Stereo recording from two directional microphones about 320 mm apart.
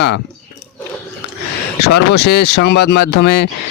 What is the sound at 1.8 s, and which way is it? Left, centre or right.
Speech, left.